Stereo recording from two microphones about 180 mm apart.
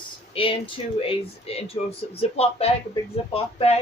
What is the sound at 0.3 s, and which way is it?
Speech, 30° left (ahead or behind).